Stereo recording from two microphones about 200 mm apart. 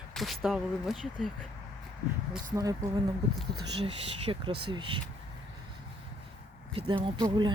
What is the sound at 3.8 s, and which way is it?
Speech, 25° right (ahead or behind).